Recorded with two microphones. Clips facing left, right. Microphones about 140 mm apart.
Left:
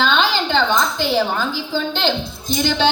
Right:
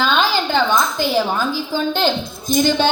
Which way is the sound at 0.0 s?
45° right (ahead or behind).